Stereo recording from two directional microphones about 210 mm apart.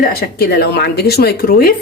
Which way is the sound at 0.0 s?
45° left (ahead or behind).